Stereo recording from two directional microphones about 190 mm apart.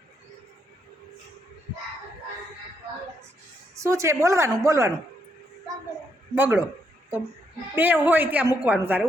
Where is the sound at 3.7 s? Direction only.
15° right (ahead or behind).